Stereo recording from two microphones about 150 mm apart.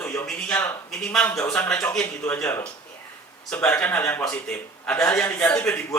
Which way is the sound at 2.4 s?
20° left (ahead or behind).